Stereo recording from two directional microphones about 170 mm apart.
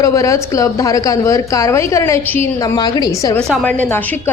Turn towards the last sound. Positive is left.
turn(degrees=10)  # may be behind; listen again after turning